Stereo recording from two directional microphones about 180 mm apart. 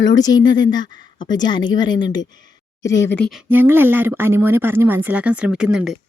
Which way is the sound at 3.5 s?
10° right (ahead or behind).